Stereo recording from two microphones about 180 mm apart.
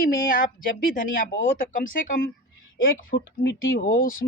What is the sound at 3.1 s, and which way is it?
Speech, 75° left (ahead or behind).